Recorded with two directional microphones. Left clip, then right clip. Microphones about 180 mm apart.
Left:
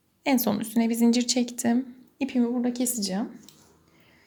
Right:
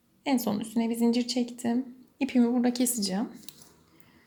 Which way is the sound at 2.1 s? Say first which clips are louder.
Right 1 dB; 5° right (ahead or behind).